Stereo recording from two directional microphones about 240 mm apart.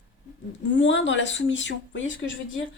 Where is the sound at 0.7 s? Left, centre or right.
Left.